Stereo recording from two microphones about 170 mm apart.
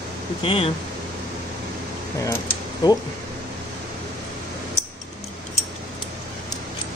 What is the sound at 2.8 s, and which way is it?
Speech, 20° left (ahead or behind).